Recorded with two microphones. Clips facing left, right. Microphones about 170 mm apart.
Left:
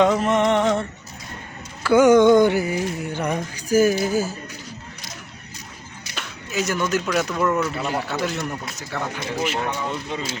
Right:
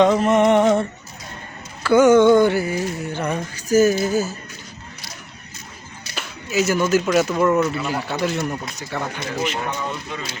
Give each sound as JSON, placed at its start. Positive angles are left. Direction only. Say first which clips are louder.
{"t": 0.0, "sound": "a sound", "louder": "right 3 dB", "side_deg": 0}
{"t": 1.8, "sound": "music", "louder": "right 1 dB", "side_deg": 10}
{"t": 6.1, "sound": "a sound", "louder": "right 5 dB", "side_deg": -5}
{"t": 7.1, "sound": "speech", "louder": "right 5 dB", "side_deg": -5}
{"t": 7.3, "sound": "speech", "louder": "right 4 dB", "side_deg": -20}
{"t": 8.2, "sound": "speech", "louder": "right 3 dB", "side_deg": 0}
{"t": 10.1, "sound": "speech", "louder": "left 2 dB", "side_deg": 30}